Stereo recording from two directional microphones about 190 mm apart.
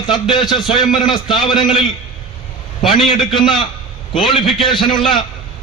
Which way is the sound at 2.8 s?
25° left (ahead or behind).